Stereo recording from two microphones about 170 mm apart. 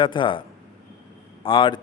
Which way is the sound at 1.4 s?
30° left (ahead or behind).